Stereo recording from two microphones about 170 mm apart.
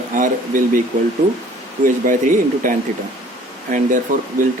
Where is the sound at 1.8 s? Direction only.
55° right (ahead or behind).